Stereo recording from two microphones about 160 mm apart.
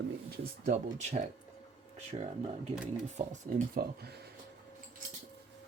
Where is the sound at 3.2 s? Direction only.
50° right (ahead or behind).